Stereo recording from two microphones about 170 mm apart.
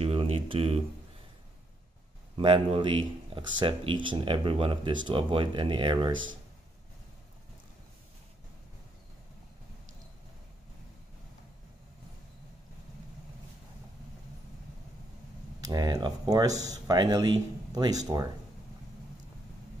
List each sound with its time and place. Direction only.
0.0 s a sound: 35° right (ahead or behind)
2.3 s speech: 30° right (ahead or behind)
15.6 s speech: 20° right (ahead or behind)